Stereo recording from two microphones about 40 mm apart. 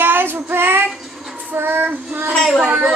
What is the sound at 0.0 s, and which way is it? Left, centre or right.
Child singing, right.